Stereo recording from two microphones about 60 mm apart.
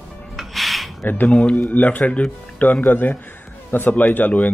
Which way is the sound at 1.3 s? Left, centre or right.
Centre.